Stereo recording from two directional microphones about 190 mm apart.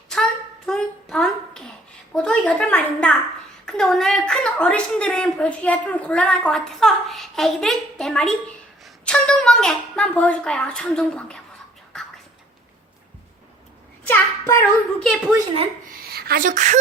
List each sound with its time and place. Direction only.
0.1 s a sound: 5° left (ahead or behind)
2.1 s a woman's voice: 5° left (ahead or behind)
14.1 s a child's voice: 10° left (ahead or behind)
16.1 s speech: 55° right (ahead or behind)